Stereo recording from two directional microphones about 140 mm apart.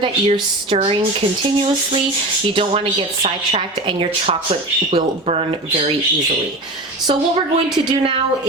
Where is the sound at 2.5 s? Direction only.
35° right (ahead or behind).